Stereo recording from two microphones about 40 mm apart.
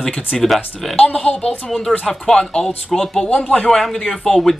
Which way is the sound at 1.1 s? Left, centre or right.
Left.